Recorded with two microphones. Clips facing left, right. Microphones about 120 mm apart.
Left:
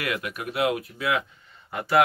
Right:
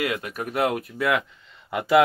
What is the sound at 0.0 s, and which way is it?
Speech, 30° right (ahead or behind).